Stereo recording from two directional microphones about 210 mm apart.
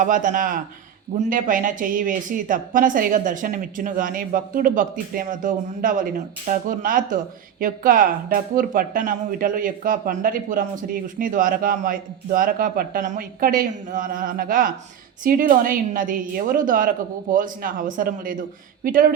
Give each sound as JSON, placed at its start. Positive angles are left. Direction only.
{"t": 0.0, "sound": "speech", "side_deg": -40}